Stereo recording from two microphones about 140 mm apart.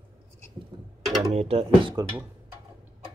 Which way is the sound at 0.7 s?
35° right (ahead or behind).